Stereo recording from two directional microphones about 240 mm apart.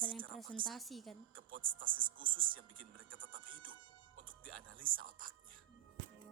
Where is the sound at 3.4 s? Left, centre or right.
Right.